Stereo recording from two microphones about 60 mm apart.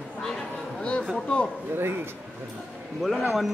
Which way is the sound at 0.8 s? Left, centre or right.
Centre.